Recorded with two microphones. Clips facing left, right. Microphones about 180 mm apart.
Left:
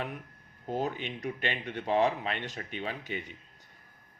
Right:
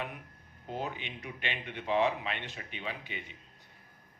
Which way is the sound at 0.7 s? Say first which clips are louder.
Left 5 dB; 45° left (ahead or behind).